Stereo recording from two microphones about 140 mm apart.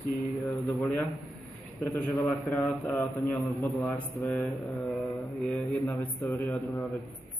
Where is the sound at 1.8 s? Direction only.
15° left (ahead or behind).